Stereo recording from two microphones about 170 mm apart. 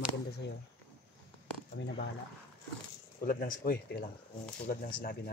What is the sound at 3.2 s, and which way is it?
Speech, 55° left (ahead or behind).